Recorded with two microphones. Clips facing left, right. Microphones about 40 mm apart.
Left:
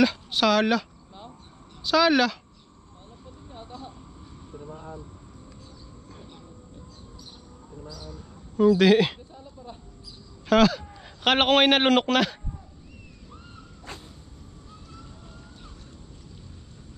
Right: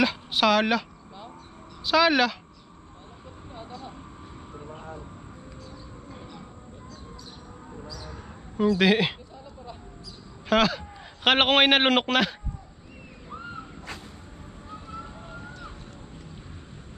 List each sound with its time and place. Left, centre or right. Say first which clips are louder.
0.0 s speech: left 1 dB; centre
1.9 s speech: even; centre
4.5 s vehicle: left 2 dB; right
8.7 s speech: left 1 dB; centre
10.5 s a man's voice: left 3 dB; centre
13.3 s crow: right 11 dB; right
14.7 s vehicle: right 9 dB; right